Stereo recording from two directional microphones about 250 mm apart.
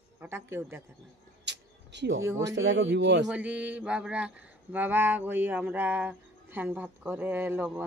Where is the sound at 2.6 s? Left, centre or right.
Right.